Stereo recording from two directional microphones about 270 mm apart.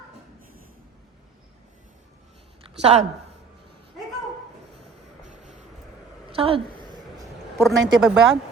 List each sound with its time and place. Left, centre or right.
2.8 s speech: right
6.3 s speech: right
7.6 s speech: centre